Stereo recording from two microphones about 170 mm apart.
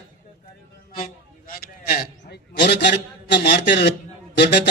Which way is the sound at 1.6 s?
65° left (ahead or behind).